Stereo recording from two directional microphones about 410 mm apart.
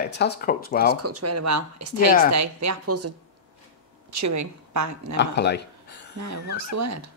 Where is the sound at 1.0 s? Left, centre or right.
Right.